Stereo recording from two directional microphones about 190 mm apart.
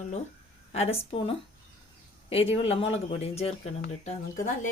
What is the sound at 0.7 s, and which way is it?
Speech, 30° left (ahead or behind).